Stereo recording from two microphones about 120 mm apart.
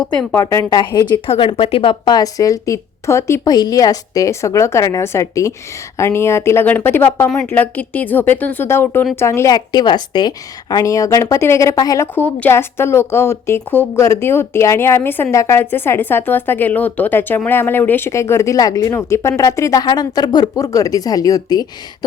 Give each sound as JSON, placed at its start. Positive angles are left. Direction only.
{"t": 0.3, "sound": "a woman's voice", "side_deg": 20}
{"t": 0.8, "sound": "speech", "side_deg": 35}
{"t": 1.3, "sound": "speech", "side_deg": 50}
{"t": 2.1, "sound": "a woman's voice", "side_deg": 30}
{"t": 9.6, "sound": "a woman's voice", "side_deg": 35}
{"t": 12.1, "sound": "a woman's voice", "side_deg": 15}